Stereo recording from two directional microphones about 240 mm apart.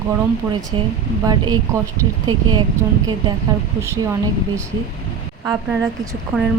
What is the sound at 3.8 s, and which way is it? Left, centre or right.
Speech, centre.